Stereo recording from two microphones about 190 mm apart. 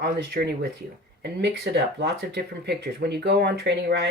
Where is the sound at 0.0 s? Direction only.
60° right (ahead or behind).